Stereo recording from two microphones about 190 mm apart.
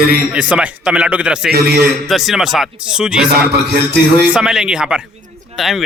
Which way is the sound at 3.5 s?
60° right (ahead or behind).